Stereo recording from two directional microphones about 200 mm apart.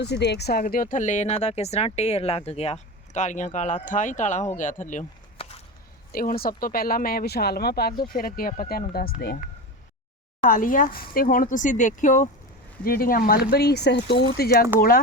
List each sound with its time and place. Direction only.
0.0 s speech: 55° left (ahead or behind); by 5.5 s 35° left (ahead or behind)
6.1 s speech: 45° left (ahead or behind)
10.4 s speech: 45° left (ahead or behind)